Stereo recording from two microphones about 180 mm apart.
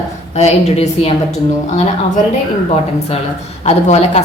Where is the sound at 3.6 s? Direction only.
35° left (ahead or behind).